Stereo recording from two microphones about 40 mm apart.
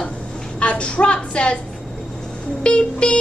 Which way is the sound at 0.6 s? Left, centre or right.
Left.